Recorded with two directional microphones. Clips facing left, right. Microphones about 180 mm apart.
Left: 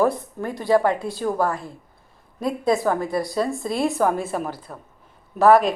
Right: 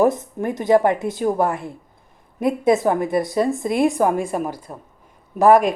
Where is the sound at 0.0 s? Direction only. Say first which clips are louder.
Right 3 dB; 20° right (ahead or behind).